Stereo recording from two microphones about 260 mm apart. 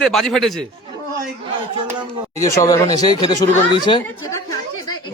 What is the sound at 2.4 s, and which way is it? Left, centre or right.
Speech, centre.